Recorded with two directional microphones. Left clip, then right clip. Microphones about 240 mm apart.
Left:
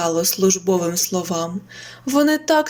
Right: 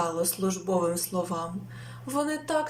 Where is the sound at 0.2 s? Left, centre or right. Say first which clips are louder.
Left 11 dB; left.